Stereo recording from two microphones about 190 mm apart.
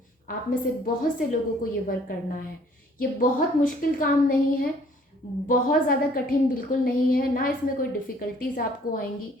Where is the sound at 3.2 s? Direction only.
45° left (ahead or behind).